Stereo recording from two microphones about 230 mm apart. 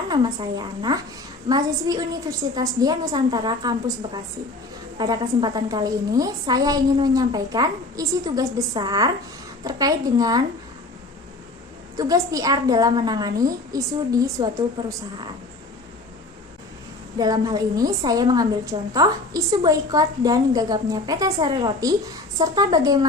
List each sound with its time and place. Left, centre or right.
0.1 s a woman's voice: centre
11.9 s a woman's voice: centre
17.2 s a woman's voice: centre